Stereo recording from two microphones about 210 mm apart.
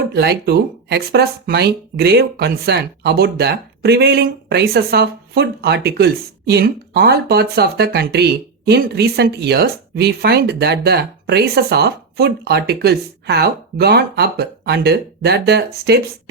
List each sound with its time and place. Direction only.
0.1 s speech: 50° right (ahead or behind)